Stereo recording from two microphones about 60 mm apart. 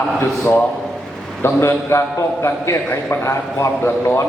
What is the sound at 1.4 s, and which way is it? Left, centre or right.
A man's voice, left.